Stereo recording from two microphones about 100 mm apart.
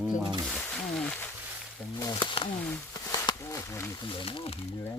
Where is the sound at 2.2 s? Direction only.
60° left (ahead or behind).